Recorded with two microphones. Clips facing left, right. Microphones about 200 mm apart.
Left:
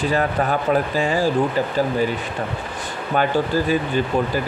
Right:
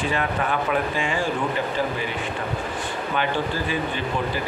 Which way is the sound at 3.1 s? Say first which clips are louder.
Left 7 dB; 40° left (ahead or behind).